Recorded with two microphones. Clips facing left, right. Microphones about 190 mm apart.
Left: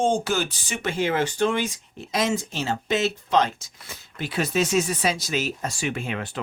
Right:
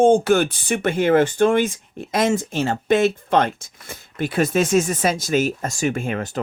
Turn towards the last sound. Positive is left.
turn(degrees=-45)  # may be behind; listen again after turning